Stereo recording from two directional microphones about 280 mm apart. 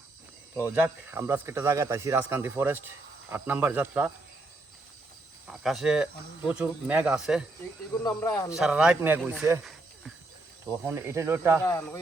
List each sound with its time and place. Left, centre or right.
0.7 s speech: centre
5.5 s cricket: centre
6.5 s speech: centre
8.0 s speech: centre
8.5 s speech: centre
10.8 s speech: centre
11.6 s speech: centre